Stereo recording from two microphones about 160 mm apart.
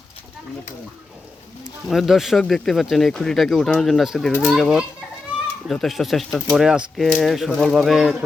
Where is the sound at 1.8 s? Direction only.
Centre (ahead or behind).